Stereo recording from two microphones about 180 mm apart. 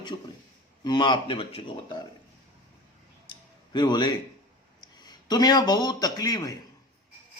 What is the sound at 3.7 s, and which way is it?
Speech, 25° left (ahead or behind).